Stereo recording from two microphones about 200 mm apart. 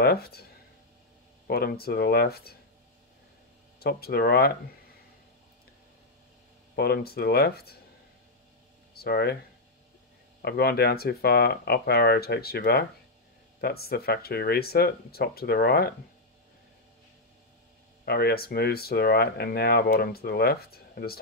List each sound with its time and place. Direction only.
0.0 s speech: 50° left (ahead or behind)
1.5 s speech: 50° left (ahead or behind)
3.8 s speech: 50° left (ahead or behind)
6.7 s speech: 50° left (ahead or behind)
8.9 s speech: 50° left (ahead or behind)
10.4 s speech: 50° left (ahead or behind)
18.0 s speech: 50° left (ahead or behind)